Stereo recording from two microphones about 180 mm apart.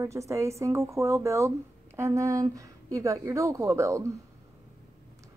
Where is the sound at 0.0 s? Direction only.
15° right (ahead or behind).